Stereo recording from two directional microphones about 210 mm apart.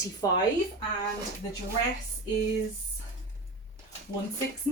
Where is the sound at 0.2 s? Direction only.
15° left (ahead or behind).